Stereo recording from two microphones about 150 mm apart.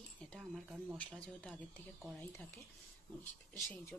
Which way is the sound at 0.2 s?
5° left (ahead or behind).